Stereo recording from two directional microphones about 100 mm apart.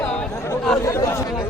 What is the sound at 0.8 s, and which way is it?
Speech, 30° left (ahead or behind).